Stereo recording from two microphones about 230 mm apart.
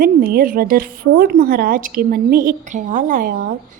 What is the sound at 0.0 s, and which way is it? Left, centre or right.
A woman's voice, right.